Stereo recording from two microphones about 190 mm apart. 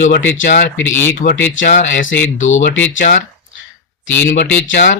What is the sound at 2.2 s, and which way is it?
Speech, 90° left.